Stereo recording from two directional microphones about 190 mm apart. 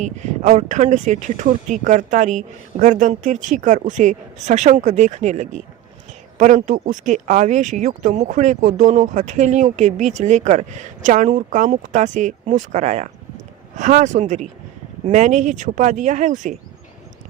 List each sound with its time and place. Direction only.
0.0 s speech: 40° right (ahead or behind)